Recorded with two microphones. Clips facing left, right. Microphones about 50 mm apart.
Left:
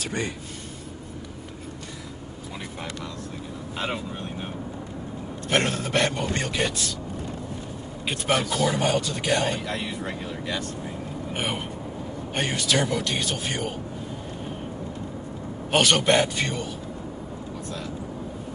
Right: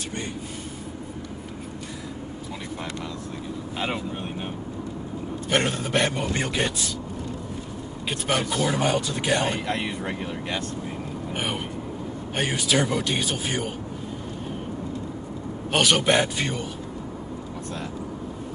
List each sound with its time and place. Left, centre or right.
5.5 s speech: centre
8.1 s speech: centre
9.4 s speech: right
11.3 s speech: centre
15.7 s speech: centre